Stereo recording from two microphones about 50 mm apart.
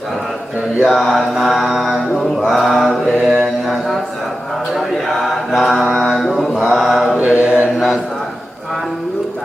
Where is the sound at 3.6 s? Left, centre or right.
Centre.